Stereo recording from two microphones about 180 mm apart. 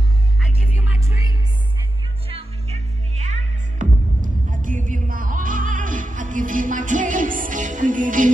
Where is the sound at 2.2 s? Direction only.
35° right (ahead or behind).